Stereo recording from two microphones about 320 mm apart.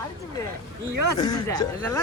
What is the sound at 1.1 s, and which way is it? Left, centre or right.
Speech, centre.